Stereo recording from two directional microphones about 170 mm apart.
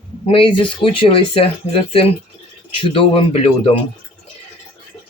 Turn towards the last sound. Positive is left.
turn(degrees=35)  # may be behind; listen again after turning